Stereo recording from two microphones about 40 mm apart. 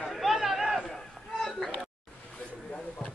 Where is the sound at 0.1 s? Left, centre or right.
Centre.